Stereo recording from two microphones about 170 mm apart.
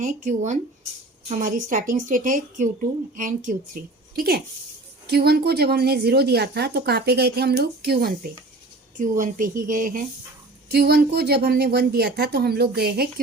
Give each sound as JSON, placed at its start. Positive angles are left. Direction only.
{"t": 0.0, "sound": "a woman's voice", "side_deg": -45}
{"t": 4.1, "sound": "a woman's voice", "side_deg": -65}
{"t": 9.0, "sound": "a woman's voice", "side_deg": -50}
{"t": 10.7, "sound": "a woman's voice", "side_deg": -70}